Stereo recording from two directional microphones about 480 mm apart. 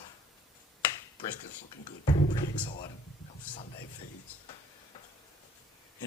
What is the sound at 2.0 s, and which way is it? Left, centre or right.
Speech, centre.